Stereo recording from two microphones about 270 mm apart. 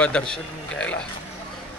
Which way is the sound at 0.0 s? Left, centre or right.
Centre.